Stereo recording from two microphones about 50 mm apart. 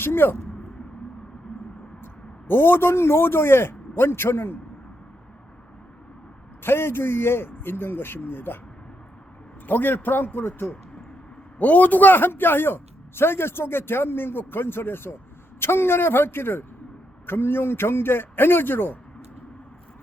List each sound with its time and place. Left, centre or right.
0.0 s a man's voice: left
2.5 s a man's voice: left
6.6 s a man's voice: left
9.6 s a man's voice: left